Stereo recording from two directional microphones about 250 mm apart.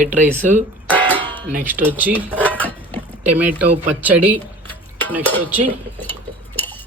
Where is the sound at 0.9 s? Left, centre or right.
Centre.